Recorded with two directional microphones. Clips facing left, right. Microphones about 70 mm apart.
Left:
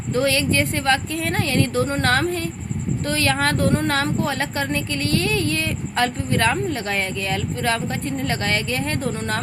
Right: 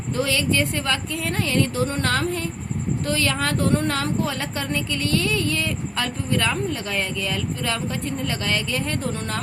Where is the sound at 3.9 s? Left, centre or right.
Left.